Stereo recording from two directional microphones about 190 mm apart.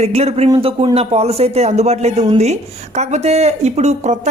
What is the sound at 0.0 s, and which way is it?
Speech, 35° right (ahead or behind).